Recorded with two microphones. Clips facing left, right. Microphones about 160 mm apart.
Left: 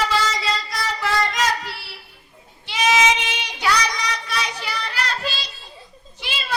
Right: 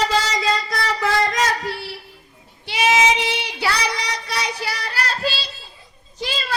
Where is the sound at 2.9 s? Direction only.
30° right (ahead or behind).